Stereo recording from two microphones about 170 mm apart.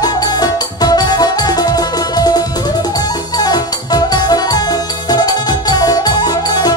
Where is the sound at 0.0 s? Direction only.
25° left (ahead or behind).